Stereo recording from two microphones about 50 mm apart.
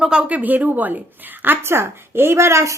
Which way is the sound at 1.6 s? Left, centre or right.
Right.